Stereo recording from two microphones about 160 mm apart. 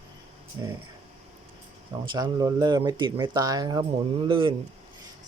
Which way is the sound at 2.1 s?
25° right (ahead or behind).